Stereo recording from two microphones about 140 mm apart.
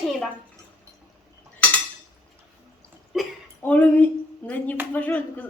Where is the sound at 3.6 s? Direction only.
10° left (ahead or behind).